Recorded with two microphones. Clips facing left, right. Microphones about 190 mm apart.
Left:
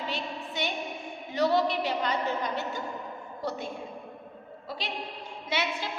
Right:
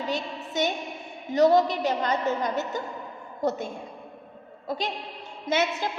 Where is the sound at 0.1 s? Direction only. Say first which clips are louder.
Right 5 dB; 45° right (ahead or behind).